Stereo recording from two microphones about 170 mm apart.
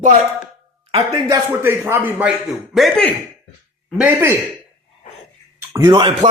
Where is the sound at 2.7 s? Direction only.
5° left (ahead or behind).